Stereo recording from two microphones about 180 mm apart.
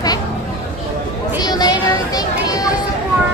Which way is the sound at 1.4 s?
20° left (ahead or behind).